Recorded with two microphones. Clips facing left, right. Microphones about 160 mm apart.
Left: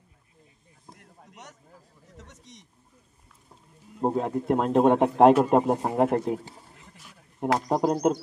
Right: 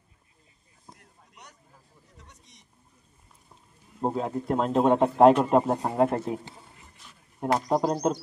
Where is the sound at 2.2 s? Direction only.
85° left.